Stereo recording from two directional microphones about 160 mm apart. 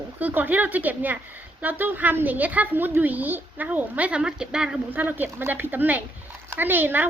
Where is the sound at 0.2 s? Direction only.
10° right (ahead or behind).